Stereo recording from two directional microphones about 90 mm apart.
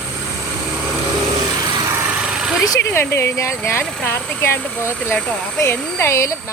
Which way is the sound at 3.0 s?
25° left (ahead or behind).